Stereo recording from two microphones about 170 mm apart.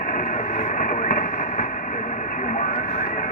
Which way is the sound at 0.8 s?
50° left (ahead or behind).